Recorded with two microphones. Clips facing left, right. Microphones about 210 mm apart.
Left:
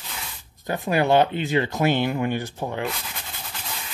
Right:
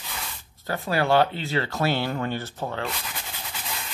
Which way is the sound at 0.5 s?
15° left (ahead or behind).